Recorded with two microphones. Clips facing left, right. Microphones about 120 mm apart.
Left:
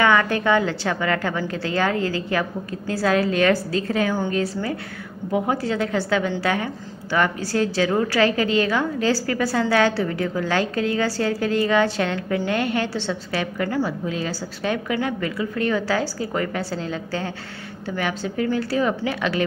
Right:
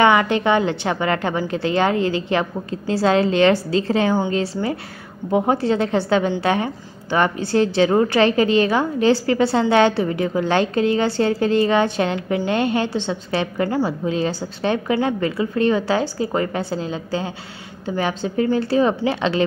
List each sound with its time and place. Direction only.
0.0 s a woman's voice: 20° right (ahead or behind)